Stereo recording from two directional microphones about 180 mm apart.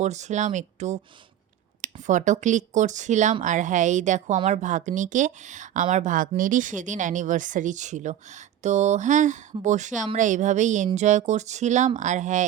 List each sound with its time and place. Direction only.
0.0 s speech: 40° right (ahead or behind)